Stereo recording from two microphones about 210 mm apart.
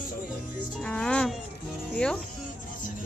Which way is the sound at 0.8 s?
5° left (ahead or behind).